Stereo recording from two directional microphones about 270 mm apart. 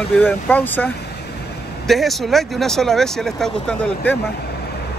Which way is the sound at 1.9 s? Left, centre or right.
Centre.